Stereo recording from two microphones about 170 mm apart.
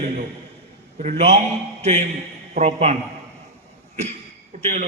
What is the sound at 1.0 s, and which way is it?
A man's voice, 40° right (ahead or behind).